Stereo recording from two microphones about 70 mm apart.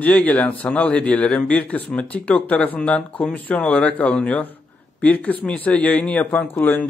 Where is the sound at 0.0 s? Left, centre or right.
Left.